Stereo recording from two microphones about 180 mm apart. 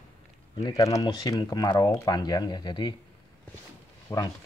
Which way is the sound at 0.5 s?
20° left (ahead or behind).